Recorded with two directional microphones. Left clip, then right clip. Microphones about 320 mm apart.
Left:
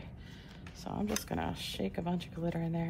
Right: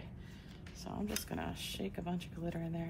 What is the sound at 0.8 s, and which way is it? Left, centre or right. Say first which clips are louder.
Speech: left 5 dB; left.